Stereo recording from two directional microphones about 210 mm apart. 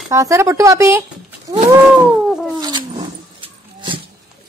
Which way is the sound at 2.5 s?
20° right (ahead or behind).